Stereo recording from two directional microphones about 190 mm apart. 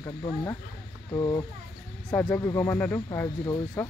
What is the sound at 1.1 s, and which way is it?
Speech, 20° left (ahead or behind).